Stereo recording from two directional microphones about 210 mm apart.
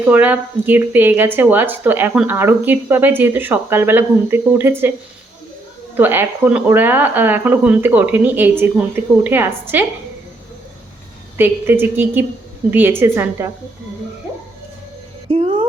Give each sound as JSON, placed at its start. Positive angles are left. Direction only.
{"t": 0.1, "sound": "speech", "side_deg": -10}
{"t": 6.0, "sound": "speech", "side_deg": -10}
{"t": 11.3, "sound": "speech", "side_deg": -10}
{"t": 15.3, "sound": "a sound", "side_deg": -25}